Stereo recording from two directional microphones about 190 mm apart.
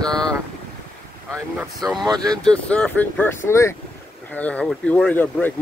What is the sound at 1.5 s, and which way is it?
Speech, centre (ahead or behind).